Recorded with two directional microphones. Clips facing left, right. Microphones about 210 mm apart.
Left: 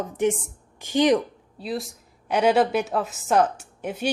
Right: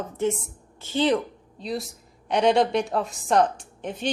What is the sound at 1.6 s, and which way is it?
A woman's voice, centre (ahead or behind).